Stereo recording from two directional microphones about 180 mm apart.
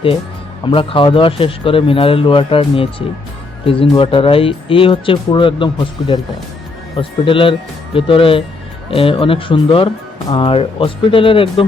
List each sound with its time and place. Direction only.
0.6 s speech: 30° left (ahead or behind)